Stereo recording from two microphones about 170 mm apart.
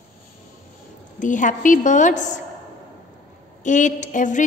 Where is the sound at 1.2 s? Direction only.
50° left (ahead or behind).